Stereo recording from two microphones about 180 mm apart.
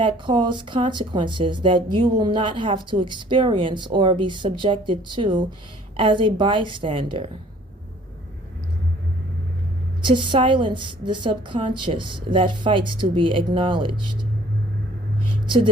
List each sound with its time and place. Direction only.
0.0 s speech: 25° right (ahead or behind)
10.0 s speech: 25° right (ahead or behind)